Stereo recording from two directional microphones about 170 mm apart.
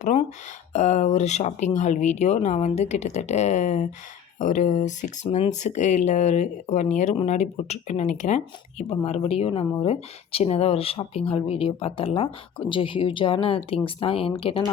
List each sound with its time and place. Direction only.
0.7 s speech: 45° left (ahead or behind)